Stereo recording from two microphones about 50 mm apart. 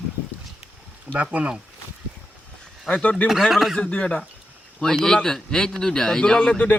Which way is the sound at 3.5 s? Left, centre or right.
Centre.